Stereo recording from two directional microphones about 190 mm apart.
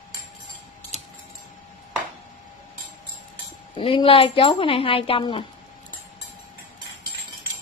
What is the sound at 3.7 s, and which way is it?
A woman's voice, 30° left (ahead or behind).